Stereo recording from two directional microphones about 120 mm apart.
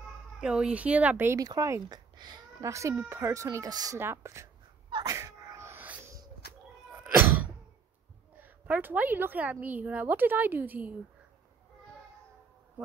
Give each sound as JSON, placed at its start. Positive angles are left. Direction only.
{"t": 0.4, "sound": "a woman's voice", "side_deg": -5}
{"t": 1.4, "sound": "speech", "side_deg": -30}
{"t": 2.6, "sound": "speech", "side_deg": -25}
{"t": 4.0, "sound": "speech", "side_deg": -20}
{"t": 4.8, "sound": "sneeze", "side_deg": -40}
{"t": 5.1, "sound": "sneeze", "side_deg": -30}
{"t": 7.0, "sound": "a sound", "side_deg": -15}
{"t": 8.4, "sound": "a woman's voice", "side_deg": -15}